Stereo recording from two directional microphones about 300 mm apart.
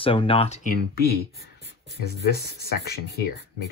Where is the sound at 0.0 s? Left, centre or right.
Centre.